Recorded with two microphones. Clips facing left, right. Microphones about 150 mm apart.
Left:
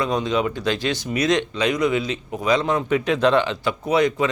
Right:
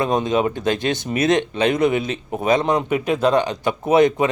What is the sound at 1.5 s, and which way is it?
A man's voice, 55° right (ahead or behind).